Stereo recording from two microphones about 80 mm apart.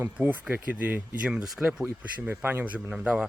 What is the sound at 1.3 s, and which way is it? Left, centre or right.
Speech, centre.